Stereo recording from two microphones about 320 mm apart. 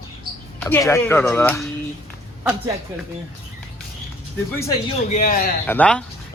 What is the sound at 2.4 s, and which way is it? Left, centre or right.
Speech, centre.